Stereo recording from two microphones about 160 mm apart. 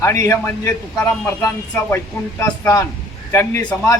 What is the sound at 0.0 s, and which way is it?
A man's voice, 20° left (ahead or behind).